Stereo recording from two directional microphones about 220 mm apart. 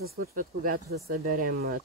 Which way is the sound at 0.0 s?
45° right (ahead or behind).